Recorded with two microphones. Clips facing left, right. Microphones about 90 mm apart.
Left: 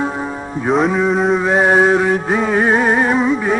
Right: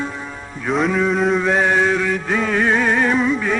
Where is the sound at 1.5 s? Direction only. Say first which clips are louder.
Left 4 dB; 35° left (ahead or behind).